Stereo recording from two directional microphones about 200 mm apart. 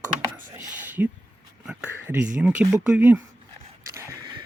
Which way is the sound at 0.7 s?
10° right (ahead or behind).